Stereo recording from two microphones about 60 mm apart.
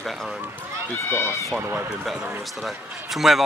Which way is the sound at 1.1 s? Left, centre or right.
Left.